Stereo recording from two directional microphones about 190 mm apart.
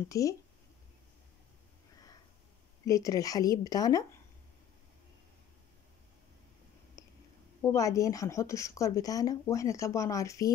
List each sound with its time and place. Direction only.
0.1 s speech: 15° left (ahead or behind)
2.8 s speech: 20° left (ahead or behind)
7.0 s a sound: 15° left (ahead or behind)
7.6 s speech: 15° left (ahead or behind)